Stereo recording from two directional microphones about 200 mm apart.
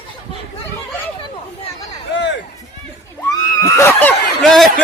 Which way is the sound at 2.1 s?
65° left (ahead or behind).